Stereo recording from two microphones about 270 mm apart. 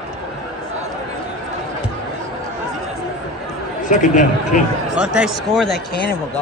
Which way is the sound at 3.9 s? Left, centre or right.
Left.